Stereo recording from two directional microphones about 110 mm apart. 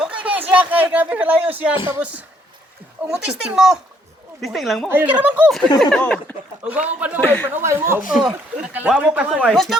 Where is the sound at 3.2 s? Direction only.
5° right (ahead or behind).